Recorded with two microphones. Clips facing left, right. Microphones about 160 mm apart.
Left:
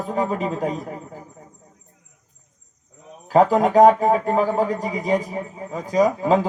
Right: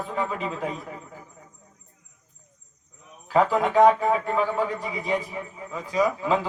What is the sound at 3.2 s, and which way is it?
A man's voice, 40° left (ahead or behind).